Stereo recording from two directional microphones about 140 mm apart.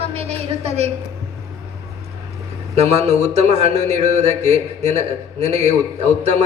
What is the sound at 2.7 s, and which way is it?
A man's voice, 50° right (ahead or behind).